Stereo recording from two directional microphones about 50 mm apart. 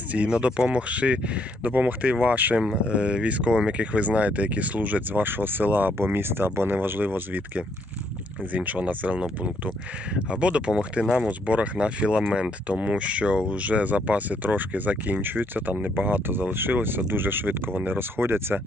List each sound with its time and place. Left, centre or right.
0.1 s speech: right